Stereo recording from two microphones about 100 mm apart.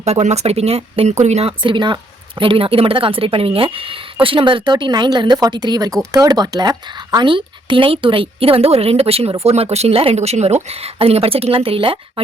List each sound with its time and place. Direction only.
0.0 s speech: 90° right
9.4 s speech: 90° right; by 12.2 s 65° right (ahead or behind)